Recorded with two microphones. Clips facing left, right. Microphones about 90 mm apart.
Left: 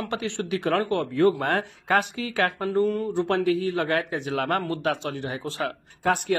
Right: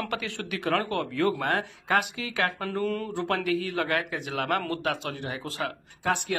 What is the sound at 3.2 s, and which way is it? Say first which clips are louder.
Speech: left 3 dB; 30° left (ahead or behind).